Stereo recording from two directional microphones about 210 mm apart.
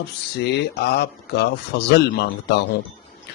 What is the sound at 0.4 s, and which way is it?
Speech, 50° left (ahead or behind).